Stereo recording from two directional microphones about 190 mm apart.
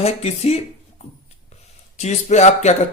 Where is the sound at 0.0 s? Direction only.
35° left (ahead or behind).